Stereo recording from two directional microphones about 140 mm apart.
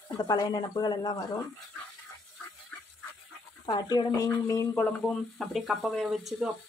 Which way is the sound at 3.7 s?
30° left (ahead or behind).